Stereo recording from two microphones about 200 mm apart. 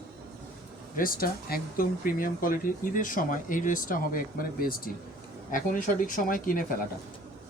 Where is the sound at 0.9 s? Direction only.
45° left (ahead or behind).